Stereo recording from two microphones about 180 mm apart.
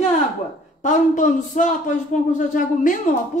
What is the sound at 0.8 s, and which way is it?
A woman's voice, 45° left (ahead or behind).